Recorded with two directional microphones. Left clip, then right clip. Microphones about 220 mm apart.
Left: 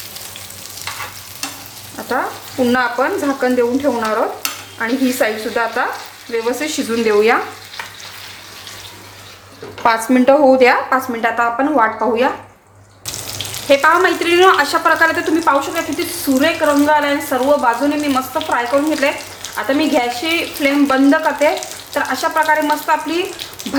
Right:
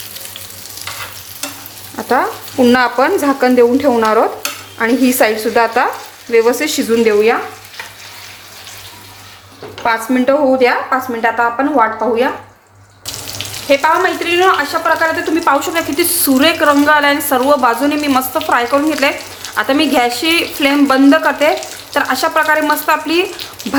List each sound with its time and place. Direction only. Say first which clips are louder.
2.6 s speech: right 5 dB; 30° right (ahead or behind)
7.0 s frying: right 1 dB; 10° right (ahead or behind)
9.8 s a woman's voice: left 1 dB; 10° left (ahead or behind)
13.7 s speech: even; 5° left (ahead or behind)
15.4 s speech: right 4 dB; 25° right (ahead or behind)